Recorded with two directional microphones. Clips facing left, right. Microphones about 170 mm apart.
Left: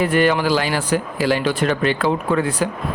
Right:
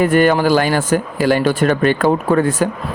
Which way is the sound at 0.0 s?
45° right (ahead or behind).